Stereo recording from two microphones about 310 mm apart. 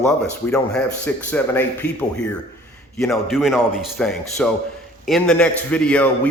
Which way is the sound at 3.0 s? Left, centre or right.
Centre.